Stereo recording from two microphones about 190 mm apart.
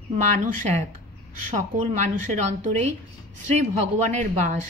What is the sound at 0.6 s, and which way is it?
Speech, 35° right (ahead or behind).